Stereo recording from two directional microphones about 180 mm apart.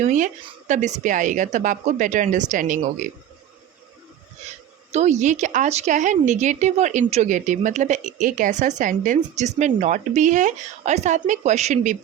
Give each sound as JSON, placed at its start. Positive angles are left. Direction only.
{"t": 0.0, "sound": "speech", "side_deg": -45}
{"t": 4.9, "sound": "speech", "side_deg": -40}